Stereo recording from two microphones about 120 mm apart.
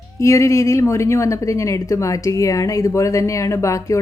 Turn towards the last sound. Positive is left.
turn(degrees=25)  # may be behind; listen again after turning